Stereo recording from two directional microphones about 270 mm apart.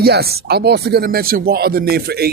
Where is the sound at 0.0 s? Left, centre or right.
Right.